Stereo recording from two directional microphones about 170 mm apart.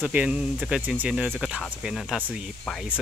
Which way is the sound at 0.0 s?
5° right (ahead or behind).